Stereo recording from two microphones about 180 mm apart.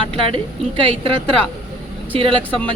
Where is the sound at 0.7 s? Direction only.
30° right (ahead or behind).